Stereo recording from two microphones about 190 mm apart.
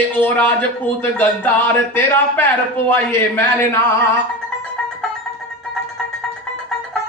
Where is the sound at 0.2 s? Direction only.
10° left (ahead or behind).